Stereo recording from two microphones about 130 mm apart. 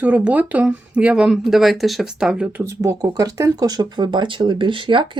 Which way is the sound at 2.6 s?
25° right (ahead or behind).